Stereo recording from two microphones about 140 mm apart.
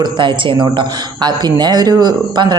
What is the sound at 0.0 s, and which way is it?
Speech, 35° right (ahead or behind).